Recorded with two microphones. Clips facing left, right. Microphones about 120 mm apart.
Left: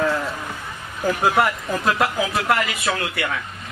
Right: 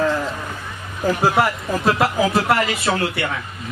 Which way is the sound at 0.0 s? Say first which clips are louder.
Right 2 dB; centre (ahead or behind).